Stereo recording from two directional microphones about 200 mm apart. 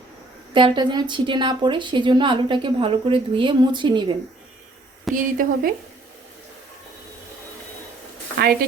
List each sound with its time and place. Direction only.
0.5 s a woman's voice: 25° right (ahead or behind)
5.1 s speech: 45° right (ahead or behind)